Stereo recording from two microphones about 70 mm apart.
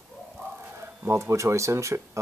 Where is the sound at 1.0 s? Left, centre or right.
Right.